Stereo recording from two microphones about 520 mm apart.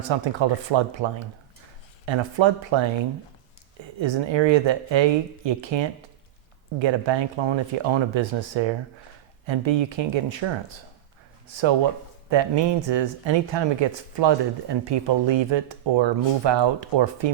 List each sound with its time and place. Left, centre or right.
0.0 s speech: right
2.0 s speech: right
4.0 s speech: right
11.5 s speech: right